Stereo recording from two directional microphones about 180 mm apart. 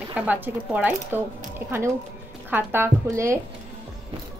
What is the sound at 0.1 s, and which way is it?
A woman's voice, 10° right (ahead or behind).